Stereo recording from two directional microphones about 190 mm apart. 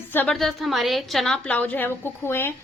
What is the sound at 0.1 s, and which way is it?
Speech, 10° left (ahead or behind).